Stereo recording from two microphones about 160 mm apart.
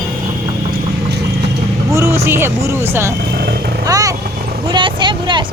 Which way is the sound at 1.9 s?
15° right (ahead or behind).